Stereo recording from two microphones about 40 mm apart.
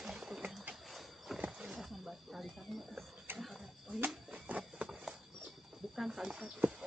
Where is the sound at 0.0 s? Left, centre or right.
Centre.